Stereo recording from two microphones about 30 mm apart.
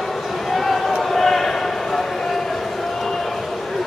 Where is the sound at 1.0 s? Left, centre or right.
Centre.